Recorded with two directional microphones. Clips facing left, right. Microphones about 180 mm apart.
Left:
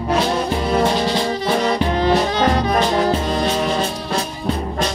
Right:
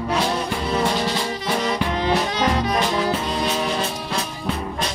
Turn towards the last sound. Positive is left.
turn(degrees=50)  # may be behind; listen again after turning